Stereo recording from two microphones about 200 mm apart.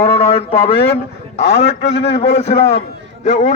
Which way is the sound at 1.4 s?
60° left (ahead or behind).